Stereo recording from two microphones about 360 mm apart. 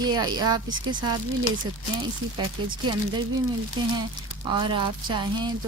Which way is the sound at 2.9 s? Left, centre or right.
Centre.